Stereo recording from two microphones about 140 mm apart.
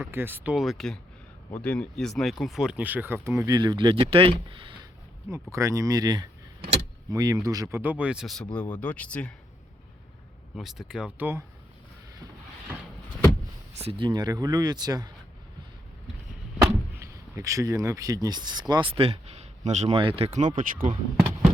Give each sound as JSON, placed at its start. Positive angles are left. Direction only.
{"t": 0.0, "sound": "speech", "side_deg": -15}
{"t": 5.3, "sound": "speech", "side_deg": -20}
{"t": 7.8, "sound": "speech", "side_deg": -10}
{"t": 8.5, "sound": "speech", "side_deg": 10}
{"t": 10.5, "sound": "speech", "side_deg": 0}
{"t": 14.0, "sound": "speech", "side_deg": -30}
{"t": 16.6, "sound": "door", "side_deg": -20}
{"t": 18.7, "sound": "speech", "side_deg": -40}
{"t": 20.0, "sound": "speech", "side_deg": -40}
{"t": 20.6, "sound": "speech", "side_deg": -75}